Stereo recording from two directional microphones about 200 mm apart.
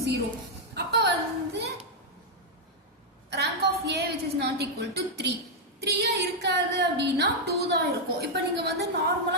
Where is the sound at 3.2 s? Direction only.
55° right (ahead or behind).